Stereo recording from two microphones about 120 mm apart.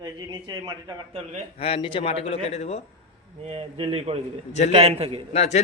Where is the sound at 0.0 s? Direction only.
35° right (ahead or behind).